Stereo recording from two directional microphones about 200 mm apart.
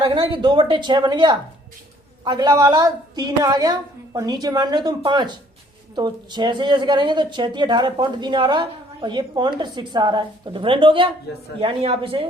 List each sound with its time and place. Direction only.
0.0 s a woman's voice: 25° right (ahead or behind)